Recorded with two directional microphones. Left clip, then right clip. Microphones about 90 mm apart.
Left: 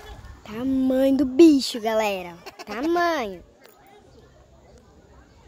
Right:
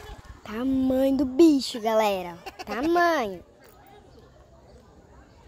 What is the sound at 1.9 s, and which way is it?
Speech, 5° left (ahead or behind).